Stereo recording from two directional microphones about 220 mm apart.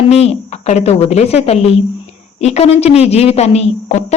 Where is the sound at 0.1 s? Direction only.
30° left (ahead or behind).